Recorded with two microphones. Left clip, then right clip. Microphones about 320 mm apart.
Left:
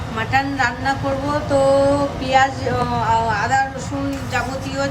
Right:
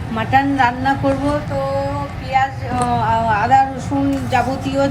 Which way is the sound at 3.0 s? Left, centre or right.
Centre.